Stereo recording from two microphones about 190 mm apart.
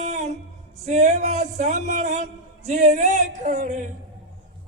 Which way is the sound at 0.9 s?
40° right (ahead or behind).